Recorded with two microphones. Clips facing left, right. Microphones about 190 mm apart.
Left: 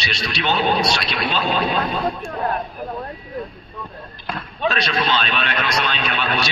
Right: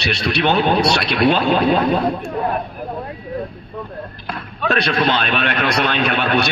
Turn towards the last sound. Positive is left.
turn(degrees=-55)  # may be behind; listen again after turning